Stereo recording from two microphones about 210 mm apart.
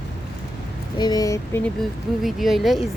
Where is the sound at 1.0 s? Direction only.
15° left (ahead or behind).